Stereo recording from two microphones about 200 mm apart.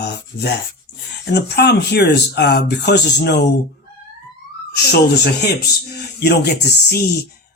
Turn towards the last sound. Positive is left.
turn(degrees=55)  # may be behind; listen again after turning